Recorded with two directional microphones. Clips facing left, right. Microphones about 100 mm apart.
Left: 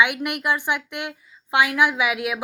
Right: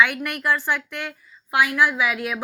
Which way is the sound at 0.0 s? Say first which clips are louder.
Even; 20° left (ahead or behind).